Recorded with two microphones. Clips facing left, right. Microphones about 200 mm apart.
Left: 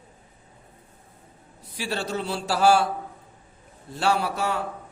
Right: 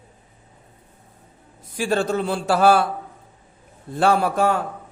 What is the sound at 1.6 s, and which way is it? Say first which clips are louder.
A man's voice: right 8 dB; 50° right (ahead or behind).